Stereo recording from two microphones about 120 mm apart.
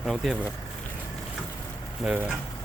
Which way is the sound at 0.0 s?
5° right (ahead or behind).